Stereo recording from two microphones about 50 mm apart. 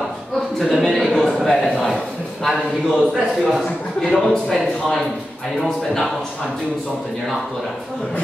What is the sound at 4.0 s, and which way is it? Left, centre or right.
Speech, centre.